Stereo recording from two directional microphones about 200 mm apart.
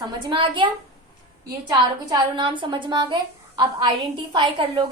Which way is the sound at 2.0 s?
20° right (ahead or behind).